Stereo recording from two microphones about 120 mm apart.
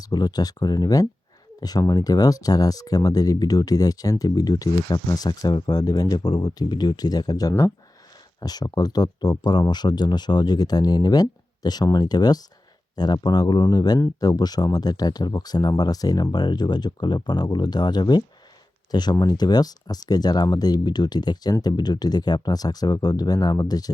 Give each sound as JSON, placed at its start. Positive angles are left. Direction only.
{"t": 0.0, "sound": "speech", "side_deg": 35}